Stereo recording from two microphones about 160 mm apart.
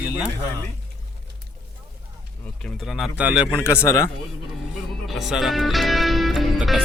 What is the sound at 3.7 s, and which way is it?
Speech, 15° left (ahead or behind).